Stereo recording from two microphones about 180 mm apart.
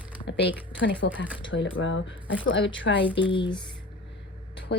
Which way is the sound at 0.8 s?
90° left.